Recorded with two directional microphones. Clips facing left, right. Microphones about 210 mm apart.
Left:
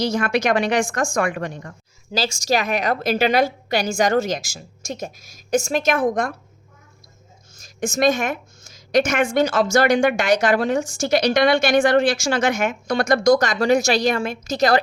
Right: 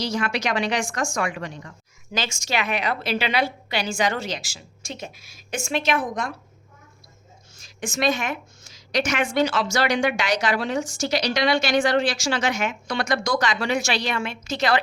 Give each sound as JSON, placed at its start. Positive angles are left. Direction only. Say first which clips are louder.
{"t": 0.0, "sound": "a woman's voice", "louder": "left 5 dB", "side_deg": 50}
{"t": 2.1, "sound": "a woman's voice", "louder": "left 6 dB", "side_deg": 35}
{"t": 7.5, "sound": "a woman's voice", "louder": "left 6 dB", "side_deg": 45}